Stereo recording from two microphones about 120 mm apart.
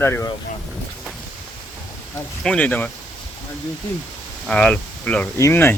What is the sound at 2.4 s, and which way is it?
Speech, 10° left (ahead or behind).